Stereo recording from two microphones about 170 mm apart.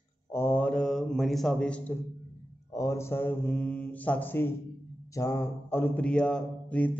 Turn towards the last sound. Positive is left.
turn(degrees=10)  # may be behind; listen again after turning